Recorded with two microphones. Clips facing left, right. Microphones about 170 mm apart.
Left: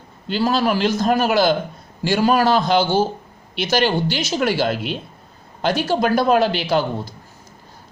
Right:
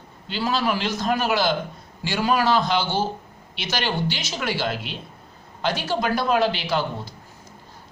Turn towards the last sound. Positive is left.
turn(degrees=45)  # may be behind; listen again after turning